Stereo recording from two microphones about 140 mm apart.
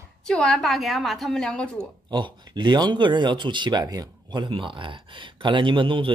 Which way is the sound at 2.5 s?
30° right (ahead or behind).